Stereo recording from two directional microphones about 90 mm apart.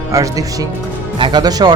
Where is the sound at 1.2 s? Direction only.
60° right (ahead or behind).